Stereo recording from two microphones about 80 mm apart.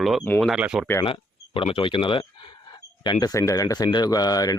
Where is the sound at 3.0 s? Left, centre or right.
Left.